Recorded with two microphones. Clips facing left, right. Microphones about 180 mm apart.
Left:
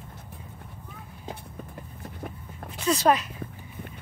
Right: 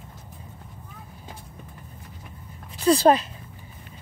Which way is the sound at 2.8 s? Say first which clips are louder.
Right 5 dB; 30° right (ahead or behind).